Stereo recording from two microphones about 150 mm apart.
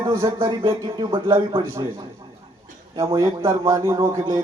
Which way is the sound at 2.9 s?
20° right (ahead or behind).